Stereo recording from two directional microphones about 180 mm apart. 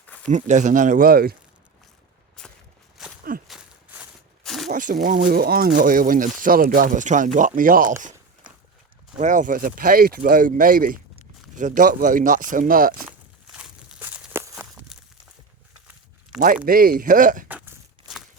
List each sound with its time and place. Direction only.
0.3 s speech: 40° right (ahead or behind); by 1.4 s 55° right (ahead or behind)
2.4 s walk: 5° left (ahead or behind)
3.4 s a sound: centre (ahead or behind)
4.7 s speech: 45° right (ahead or behind)
9.1 s speech: 45° right (ahead or behind)
13.0 s a sound: 5° right (ahead or behind)
14.5 s walk: 5° right (ahead or behind)
16.6 s speech: 55° right (ahead or behind)
17.5 s tearing: 10° right (ahead or behind)